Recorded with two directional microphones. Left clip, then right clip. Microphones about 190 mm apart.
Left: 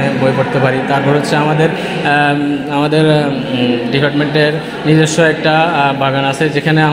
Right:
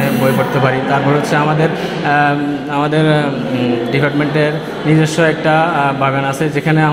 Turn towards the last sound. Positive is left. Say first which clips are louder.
# left 2 dB
turn(degrees=15)  # may be behind; listen again after turning